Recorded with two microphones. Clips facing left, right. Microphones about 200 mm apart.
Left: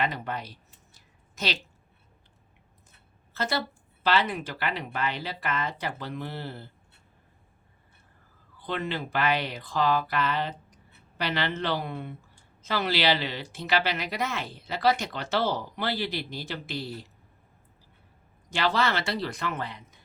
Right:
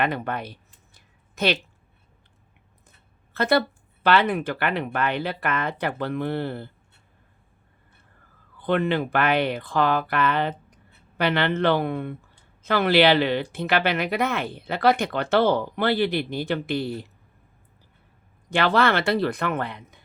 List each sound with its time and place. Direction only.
0.0 s a sound: 60° right (ahead or behind)
3.3 s speech: 60° right (ahead or behind)
8.5 s speech: 55° right (ahead or behind)
18.5 s speech: 60° right (ahead or behind)